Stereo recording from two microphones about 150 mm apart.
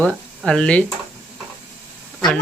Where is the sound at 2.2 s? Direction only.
5° left (ahead or behind).